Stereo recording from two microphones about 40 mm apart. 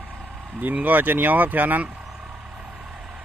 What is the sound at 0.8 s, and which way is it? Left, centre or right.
Speech, right.